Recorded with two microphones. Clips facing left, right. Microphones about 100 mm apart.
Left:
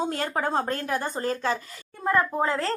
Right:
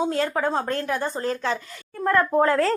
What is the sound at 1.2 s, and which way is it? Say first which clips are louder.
Speech: right 1 dB; 40° left (ahead or behind).